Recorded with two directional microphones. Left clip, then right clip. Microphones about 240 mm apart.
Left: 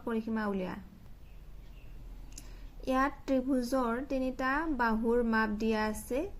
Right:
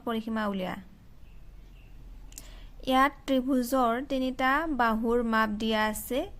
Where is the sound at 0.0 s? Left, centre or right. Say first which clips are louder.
Right 3 dB; right.